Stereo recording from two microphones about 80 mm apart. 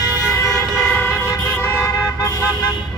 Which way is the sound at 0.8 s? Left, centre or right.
Left.